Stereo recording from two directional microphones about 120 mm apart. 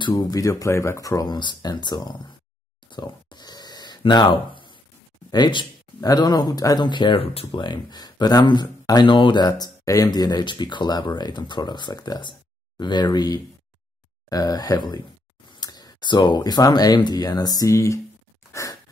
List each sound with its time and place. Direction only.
0.1 s speech: 30° left (ahead or behind)
2.9 s a sound: 40° left (ahead or behind)
5.3 s speech: 40° left (ahead or behind)
18.5 s breathing: 25° left (ahead or behind)